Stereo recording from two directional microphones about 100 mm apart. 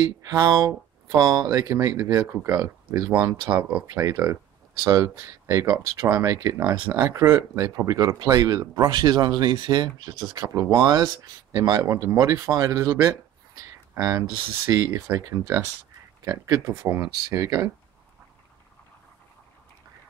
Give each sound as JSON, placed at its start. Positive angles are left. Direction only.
{"t": 0.0, "sound": "speech", "side_deg": -40}
{"t": 3.1, "sound": "speech", "side_deg": -15}
{"t": 6.9, "sound": "speech", "side_deg": -30}
{"t": 16.3, "sound": "speech", "side_deg": -40}
{"t": 16.6, "sound": "speech", "side_deg": -25}